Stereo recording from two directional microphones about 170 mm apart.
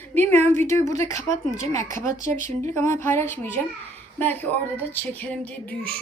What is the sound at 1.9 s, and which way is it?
Speech, 50° right (ahead or behind).